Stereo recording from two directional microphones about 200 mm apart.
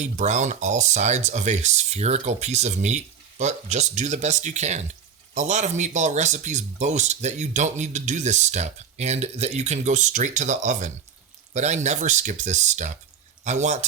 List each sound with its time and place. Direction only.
0.0 s speech: 35° right (ahead or behind)